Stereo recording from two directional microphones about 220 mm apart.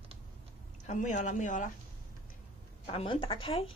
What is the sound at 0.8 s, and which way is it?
Speech, 35° left (ahead or behind).